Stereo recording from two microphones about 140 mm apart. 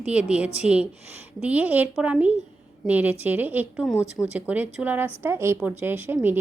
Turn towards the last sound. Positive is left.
turn(degrees=-15)  # may be behind; listen again after turning